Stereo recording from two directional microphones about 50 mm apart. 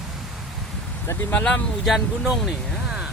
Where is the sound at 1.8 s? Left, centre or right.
Centre.